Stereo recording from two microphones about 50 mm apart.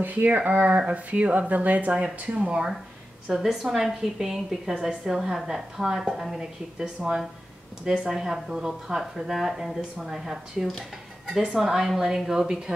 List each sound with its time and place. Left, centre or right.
0.0 s speech: right; by 2.7 s centre
3.3 s speech: centre